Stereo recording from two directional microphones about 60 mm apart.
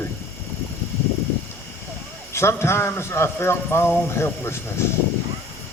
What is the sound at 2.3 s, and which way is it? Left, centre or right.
A man's voice, left.